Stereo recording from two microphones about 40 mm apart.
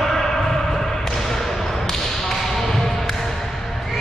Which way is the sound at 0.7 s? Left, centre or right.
Centre.